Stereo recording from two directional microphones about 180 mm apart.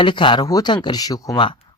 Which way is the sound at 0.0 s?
25° left (ahead or behind).